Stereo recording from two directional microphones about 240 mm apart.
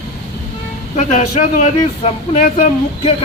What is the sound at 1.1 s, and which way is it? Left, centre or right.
Speech, left.